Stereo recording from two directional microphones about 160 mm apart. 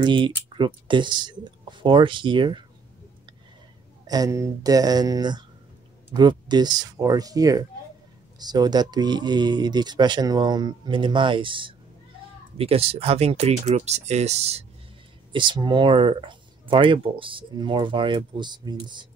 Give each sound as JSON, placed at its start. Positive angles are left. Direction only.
{"t": 0.0, "sound": "speech", "side_deg": -30}
{"t": 4.1, "sound": "speech", "side_deg": -20}
{"t": 15.3, "sound": "speech", "side_deg": -30}